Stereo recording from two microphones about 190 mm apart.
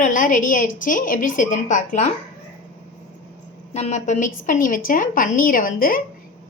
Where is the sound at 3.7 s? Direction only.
35° left (ahead or behind).